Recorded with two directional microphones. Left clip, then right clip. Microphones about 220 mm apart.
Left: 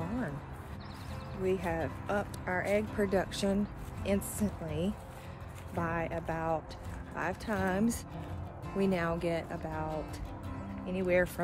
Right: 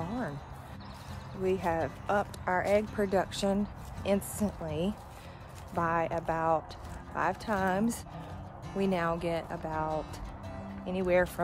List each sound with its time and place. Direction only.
1.4 s speech: 15° right (ahead or behind)
10.9 s speech: 15° right (ahead or behind)